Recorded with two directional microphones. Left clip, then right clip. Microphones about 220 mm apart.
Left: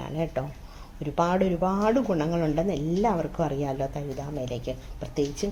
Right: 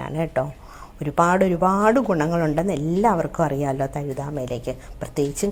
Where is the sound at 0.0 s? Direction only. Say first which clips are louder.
Right 6 dB; 15° right (ahead or behind).